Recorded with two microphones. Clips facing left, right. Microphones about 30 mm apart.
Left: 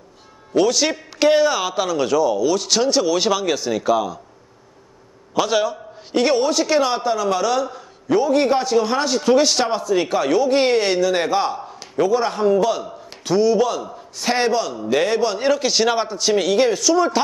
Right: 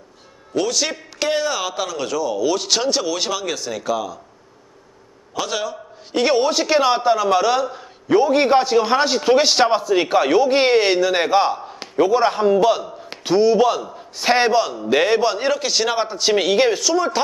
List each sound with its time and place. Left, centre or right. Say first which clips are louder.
0.5 s a man's voice: left 4 dB; centre
2.4 s a man's voice: left 1 dB; centre
5.3 s a man's voice: left 5 dB; centre
6.1 s a man's voice: even; centre
15.4 s a man's voice: left 2 dB; centre
16.1 s a man's voice: right 1 dB; centre
16.9 s a man's voice: left 2 dB; centre